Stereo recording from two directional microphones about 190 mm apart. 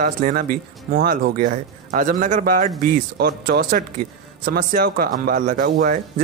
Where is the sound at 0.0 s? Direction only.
45° right (ahead or behind).